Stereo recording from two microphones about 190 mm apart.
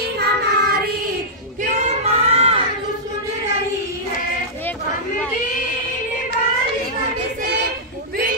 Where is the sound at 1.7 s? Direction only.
40° right (ahead or behind).